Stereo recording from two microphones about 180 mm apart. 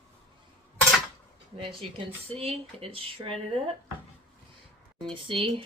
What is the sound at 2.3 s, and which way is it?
Speech, 35° right (ahead or behind).